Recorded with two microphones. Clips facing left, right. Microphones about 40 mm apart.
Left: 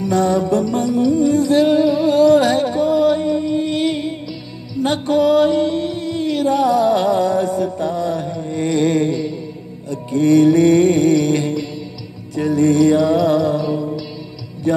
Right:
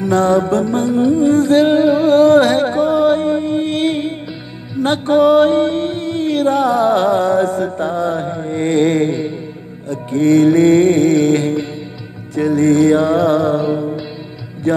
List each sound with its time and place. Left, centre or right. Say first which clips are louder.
0.0 s music: right 3 dB; right